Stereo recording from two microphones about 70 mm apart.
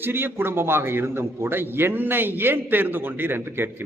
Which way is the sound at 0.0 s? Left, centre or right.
Right.